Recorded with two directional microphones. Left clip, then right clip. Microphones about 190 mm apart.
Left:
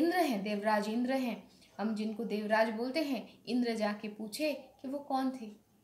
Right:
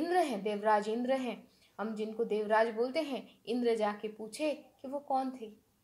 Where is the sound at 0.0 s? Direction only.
25° right (ahead or behind).